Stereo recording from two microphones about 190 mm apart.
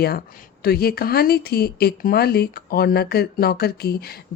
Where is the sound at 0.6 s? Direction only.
55° left (ahead or behind).